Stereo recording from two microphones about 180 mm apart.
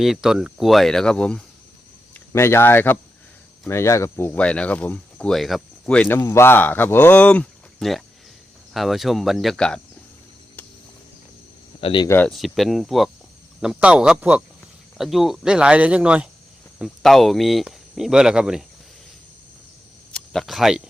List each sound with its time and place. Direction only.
0.0 s speech: centre (ahead or behind)
11.8 s speech: 30° left (ahead or behind)
12.0 s speech: 10° left (ahead or behind)
12.3 s speech: centre (ahead or behind)
20.1 s speech: centre (ahead or behind)